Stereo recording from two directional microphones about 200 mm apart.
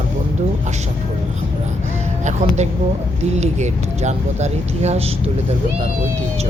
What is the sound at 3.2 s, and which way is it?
Speech, 35° right (ahead or behind).